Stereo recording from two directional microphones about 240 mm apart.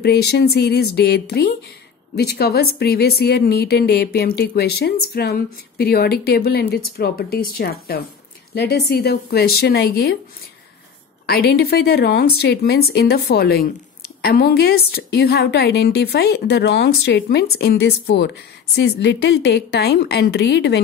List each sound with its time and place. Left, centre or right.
0.0 s a woman's voice: left
11.2 s a woman's voice: left